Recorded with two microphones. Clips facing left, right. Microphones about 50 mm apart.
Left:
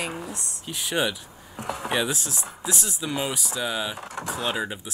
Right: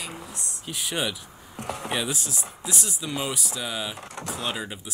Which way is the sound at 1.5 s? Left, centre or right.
Centre.